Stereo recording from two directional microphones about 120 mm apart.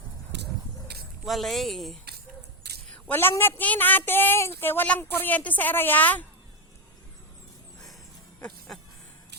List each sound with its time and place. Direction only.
1.2 s speech: centre (ahead or behind)
3.1 s a woman's voice: 20° left (ahead or behind)
8.4 s speech: 5° left (ahead or behind)